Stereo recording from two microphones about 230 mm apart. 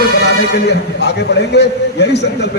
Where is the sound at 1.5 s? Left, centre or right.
Left.